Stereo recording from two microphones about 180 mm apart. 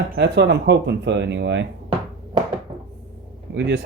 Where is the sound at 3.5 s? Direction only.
70° right (ahead or behind).